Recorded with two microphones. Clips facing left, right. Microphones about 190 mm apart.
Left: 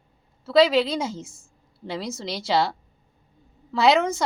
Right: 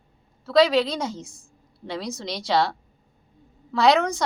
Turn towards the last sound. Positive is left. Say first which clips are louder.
# even
turn(degrees=5)  # may be behind; listen again after turning